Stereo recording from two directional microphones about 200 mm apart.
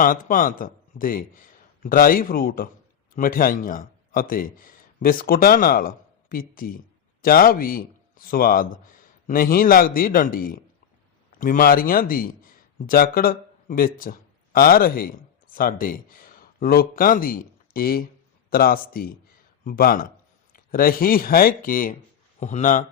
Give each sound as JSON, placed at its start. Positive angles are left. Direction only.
{"t": 0.0, "sound": "a man's voice", "side_deg": 45}